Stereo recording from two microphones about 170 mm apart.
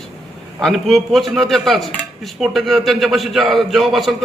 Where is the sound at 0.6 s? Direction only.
Centre (ahead or behind).